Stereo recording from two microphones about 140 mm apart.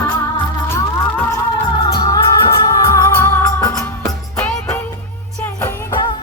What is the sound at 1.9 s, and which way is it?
Music, 25° left (ahead or behind).